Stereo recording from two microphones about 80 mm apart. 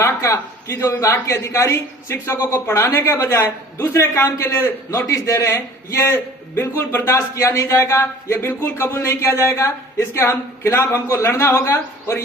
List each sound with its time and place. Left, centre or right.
0.0 s a man's voice: left
1.1 s speech: left
6.1 s a man's voice: left
7.4 s speech: left
9.0 s a man's voice: left